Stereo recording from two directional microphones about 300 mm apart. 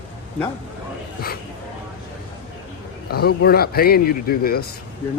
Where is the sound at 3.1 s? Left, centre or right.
Left.